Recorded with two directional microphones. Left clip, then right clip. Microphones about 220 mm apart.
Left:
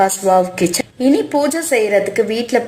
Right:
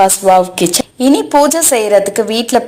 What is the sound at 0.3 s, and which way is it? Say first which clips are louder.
Speech: right 4 dB; 25° right (ahead or behind).